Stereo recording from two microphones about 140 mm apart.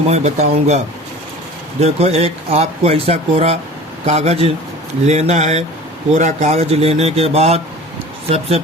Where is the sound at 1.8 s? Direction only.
50° right (ahead or behind).